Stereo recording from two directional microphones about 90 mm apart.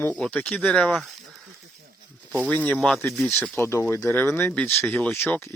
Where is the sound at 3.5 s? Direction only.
30° left (ahead or behind).